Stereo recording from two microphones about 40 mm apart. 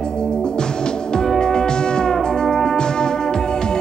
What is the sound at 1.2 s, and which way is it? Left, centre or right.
Music, centre.